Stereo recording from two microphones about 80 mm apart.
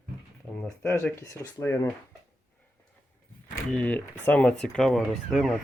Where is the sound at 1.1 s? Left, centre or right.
Left.